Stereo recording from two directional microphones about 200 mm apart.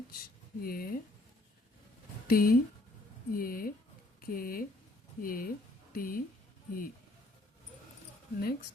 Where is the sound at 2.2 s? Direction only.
45° left (ahead or behind).